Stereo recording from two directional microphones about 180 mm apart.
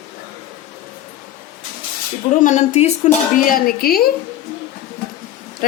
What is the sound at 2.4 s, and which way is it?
Speech, 40° left (ahead or behind).